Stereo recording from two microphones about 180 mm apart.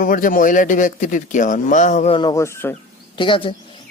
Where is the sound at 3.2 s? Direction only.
30° left (ahead or behind).